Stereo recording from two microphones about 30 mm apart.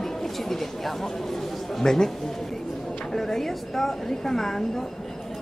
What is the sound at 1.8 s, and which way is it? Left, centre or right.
Speech, centre.